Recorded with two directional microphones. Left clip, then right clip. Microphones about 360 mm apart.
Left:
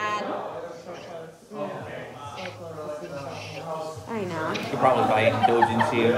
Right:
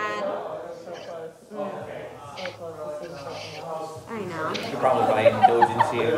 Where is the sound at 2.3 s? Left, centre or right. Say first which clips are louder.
Right 3 dB; right.